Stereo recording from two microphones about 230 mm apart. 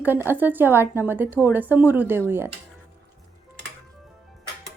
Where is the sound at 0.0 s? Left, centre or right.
Centre.